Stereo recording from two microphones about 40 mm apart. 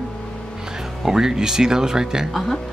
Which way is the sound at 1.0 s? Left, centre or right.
Centre.